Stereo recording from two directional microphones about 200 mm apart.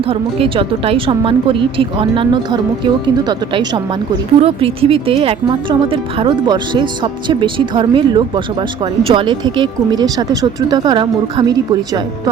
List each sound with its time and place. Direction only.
0.1 s speech: 30° right (ahead or behind)
4.4 s speech: 30° right (ahead or behind)